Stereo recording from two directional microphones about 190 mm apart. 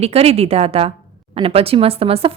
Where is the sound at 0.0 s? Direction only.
35° right (ahead or behind).